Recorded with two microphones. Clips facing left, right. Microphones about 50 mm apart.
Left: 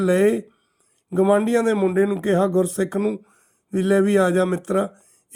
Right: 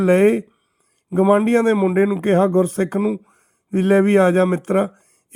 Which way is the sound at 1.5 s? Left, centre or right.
Right.